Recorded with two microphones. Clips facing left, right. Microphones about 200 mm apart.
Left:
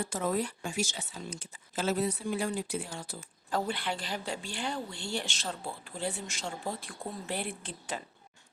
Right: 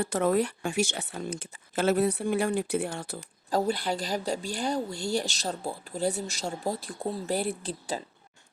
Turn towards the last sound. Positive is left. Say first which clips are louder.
# right 6 dB
turn(degrees=-35)  # may be behind; listen again after turning